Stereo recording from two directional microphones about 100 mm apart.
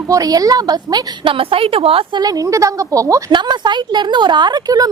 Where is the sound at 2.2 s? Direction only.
35° right (ahead or behind).